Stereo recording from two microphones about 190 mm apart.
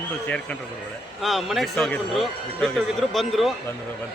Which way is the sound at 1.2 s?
Centre (ahead or behind).